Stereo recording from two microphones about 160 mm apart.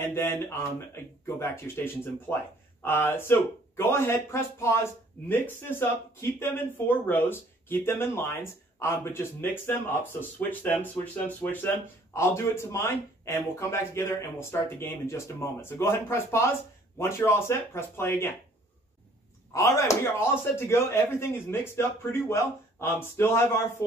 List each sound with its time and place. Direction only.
0.0 s a man's voice: 15° left (ahead or behind)
19.5 s a man's voice: 20° left (ahead or behind)